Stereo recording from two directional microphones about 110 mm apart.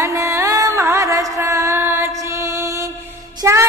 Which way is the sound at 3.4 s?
25° right (ahead or behind).